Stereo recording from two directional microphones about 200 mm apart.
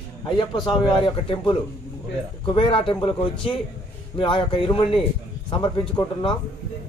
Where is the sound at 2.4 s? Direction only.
25° left (ahead or behind).